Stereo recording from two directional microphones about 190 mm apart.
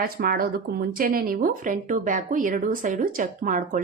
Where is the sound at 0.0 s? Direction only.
50° right (ahead or behind).